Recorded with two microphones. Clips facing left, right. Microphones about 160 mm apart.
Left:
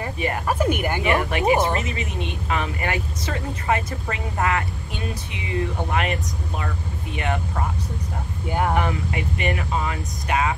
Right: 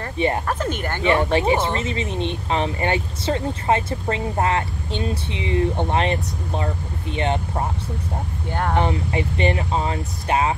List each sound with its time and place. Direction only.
0.5 s speech: 10° left (ahead or behind)
1.0 s speech: 30° right (ahead or behind)
8.5 s speech: 10° left (ahead or behind)
8.7 s speech: 30° right (ahead or behind)